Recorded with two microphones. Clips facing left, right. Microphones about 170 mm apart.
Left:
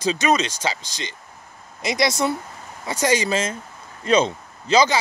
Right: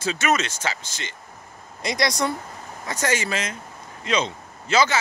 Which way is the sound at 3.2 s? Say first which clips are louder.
Left 5 dB; 35° left (ahead or behind).